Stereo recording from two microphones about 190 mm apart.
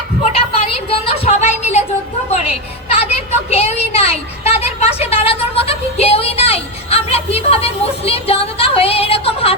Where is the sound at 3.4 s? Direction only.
35° left (ahead or behind).